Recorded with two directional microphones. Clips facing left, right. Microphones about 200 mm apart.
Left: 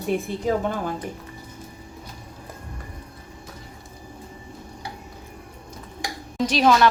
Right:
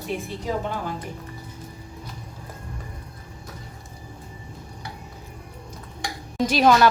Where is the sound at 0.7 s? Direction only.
50° left (ahead or behind).